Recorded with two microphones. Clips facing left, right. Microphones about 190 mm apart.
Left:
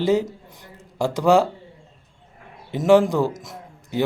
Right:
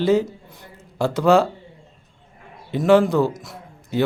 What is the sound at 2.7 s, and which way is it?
A man's voice, 15° left (ahead or behind).